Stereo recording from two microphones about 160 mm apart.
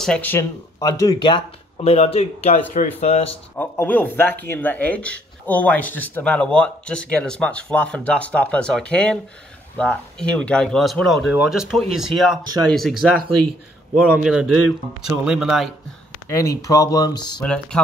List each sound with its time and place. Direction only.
0.0 s speech: 10° left (ahead or behind); by 3.3 s 45° left (ahead or behind)
3.5 s speech: 10° left (ahead or behind)
14.1 s speech: 5° right (ahead or behind)
16.3 s speech: 20° left (ahead or behind)